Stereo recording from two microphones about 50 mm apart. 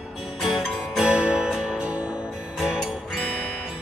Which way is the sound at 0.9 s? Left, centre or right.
Centre.